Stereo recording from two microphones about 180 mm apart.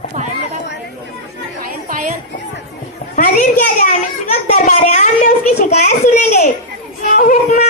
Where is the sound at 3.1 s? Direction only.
45° left (ahead or behind).